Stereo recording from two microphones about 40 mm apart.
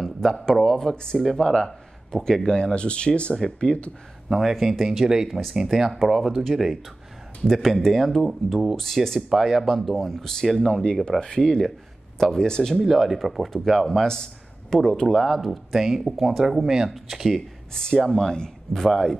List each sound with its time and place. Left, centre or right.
0.0 s speech: centre
1.5 s speech: centre
2.6 s speech: left
4.3 s speech: centre
9.3 s speech: centre
9.9 s speech: centre
10.7 s speech: left
12.8 s speech: centre
13.8 s a man's voice: centre
15.0 s speech: centre
17.9 s speech: centre